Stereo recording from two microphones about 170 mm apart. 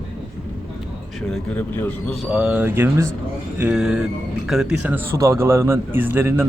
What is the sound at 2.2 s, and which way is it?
Speech, 5° right (ahead or behind).